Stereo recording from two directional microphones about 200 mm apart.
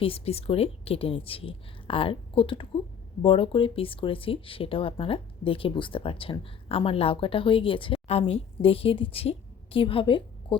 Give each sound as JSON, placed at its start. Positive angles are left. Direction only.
{"t": 0.0, "sound": "a woman's voice", "side_deg": 30}